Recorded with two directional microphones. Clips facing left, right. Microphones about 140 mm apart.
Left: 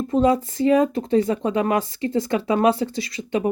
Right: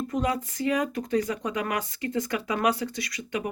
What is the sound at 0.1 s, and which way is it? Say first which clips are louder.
Speech: left 13 dB; 30° left (ahead or behind).